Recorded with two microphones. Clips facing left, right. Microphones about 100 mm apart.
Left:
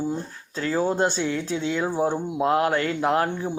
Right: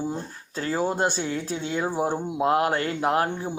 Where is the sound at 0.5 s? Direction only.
35° right (ahead or behind).